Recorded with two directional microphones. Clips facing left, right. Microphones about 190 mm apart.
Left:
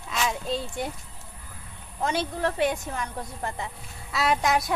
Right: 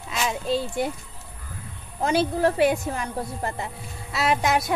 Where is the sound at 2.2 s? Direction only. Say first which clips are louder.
Right 6 dB; 40° right (ahead or behind).